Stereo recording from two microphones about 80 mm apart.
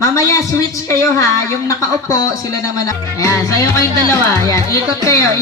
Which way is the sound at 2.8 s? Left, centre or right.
Left.